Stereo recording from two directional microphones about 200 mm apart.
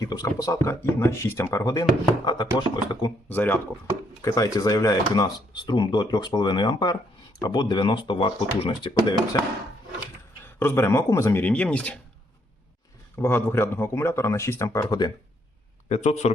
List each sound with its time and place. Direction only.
0.0 s speech: 20° left (ahead or behind)
3.2 s speech: 10° left (ahead or behind)
13.1 s speech: 10° left (ahead or behind)
15.9 s speech: 35° left (ahead or behind)